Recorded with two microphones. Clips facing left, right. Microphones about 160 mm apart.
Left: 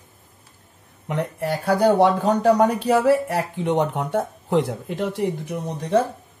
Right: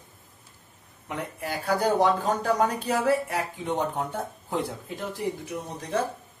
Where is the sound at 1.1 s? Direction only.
70° left (ahead or behind).